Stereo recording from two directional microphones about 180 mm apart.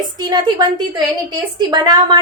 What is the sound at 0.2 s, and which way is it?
A woman's voice, 25° right (ahead or behind).